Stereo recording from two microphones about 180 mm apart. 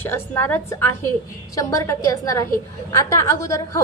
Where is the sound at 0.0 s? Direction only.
10° left (ahead or behind).